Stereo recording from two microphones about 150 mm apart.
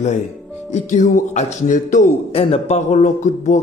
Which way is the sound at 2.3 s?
45° left (ahead or behind).